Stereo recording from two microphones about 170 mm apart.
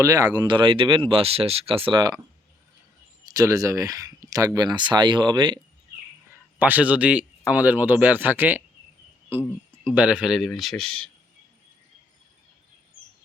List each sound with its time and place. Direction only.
0.0 s speech: 20° right (ahead or behind)
3.2 s speech: 20° right (ahead or behind)
6.3 s speech: 10° right (ahead or behind)
9.8 s speech: 10° right (ahead or behind)